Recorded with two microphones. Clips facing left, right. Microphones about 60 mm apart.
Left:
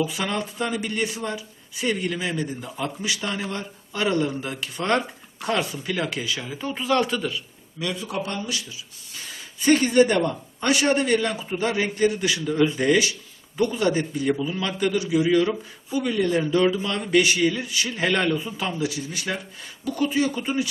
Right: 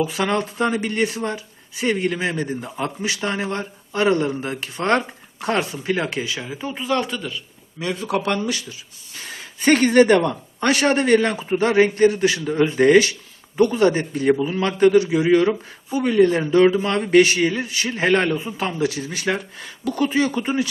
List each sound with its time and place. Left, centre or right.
0.3 s speech: right
6.5 s speech: centre
8.0 s speech: right
9.1 s speech: right
12.1 s speech: right
12.7 s speech: right
18.8 s speech: right
20.0 s speech: right